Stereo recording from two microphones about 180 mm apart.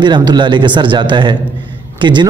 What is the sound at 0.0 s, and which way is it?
A man's voice, 25° right (ahead or behind).